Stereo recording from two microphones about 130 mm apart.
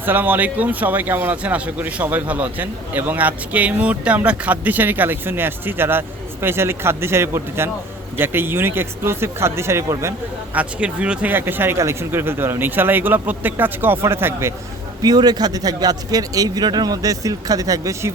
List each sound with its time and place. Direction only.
0.0 s speech: 15° right (ahead or behind)
15.0 s a man's voice: 30° right (ahead or behind)